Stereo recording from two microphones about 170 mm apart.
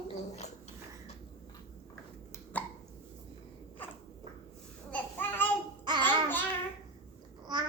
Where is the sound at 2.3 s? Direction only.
10° left (ahead or behind).